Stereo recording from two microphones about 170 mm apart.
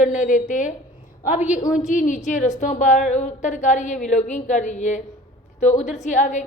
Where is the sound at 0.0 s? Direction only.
50° left (ahead or behind).